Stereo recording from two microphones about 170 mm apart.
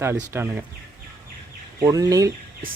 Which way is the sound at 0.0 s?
15° right (ahead or behind).